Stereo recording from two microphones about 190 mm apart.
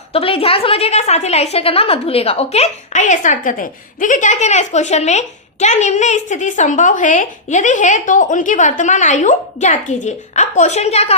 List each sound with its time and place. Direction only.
0.1 s a woman's voice: 30° left (ahead or behind)